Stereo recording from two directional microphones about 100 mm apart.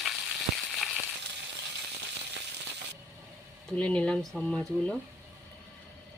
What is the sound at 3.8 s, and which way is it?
Speech, 10° left (ahead or behind).